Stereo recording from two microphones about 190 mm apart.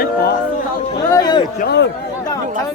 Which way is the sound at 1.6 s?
60° left (ahead or behind).